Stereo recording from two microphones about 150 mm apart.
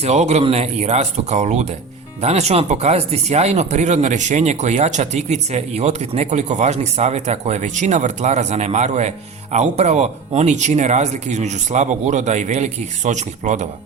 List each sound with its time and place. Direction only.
0.0 s speech: 45° right (ahead or behind)